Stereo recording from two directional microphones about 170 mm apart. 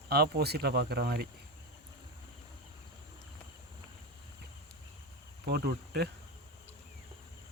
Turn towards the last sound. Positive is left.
turn(degrees=-70)  # may be behind; listen again after turning